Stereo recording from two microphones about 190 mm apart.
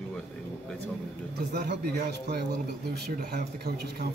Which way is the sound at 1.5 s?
60° right (ahead or behind).